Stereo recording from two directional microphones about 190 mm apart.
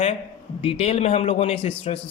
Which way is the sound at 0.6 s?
30° left (ahead or behind).